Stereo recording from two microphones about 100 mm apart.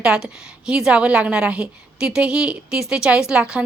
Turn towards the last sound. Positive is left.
turn(degrees=-10)  # may be behind; listen again after turning